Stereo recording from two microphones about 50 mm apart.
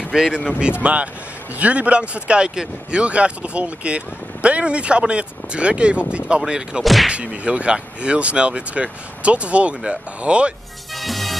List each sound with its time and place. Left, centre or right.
0.1 s speech: centre
6.8 s speech: centre
7.1 s speech: right
11.0 s music: centre